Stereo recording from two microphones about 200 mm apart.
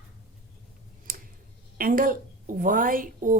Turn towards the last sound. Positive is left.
turn(degrees=-40)  # may be behind; listen again after turning